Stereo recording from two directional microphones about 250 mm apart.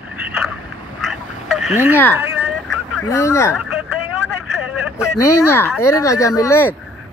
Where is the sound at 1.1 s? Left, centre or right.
Centre.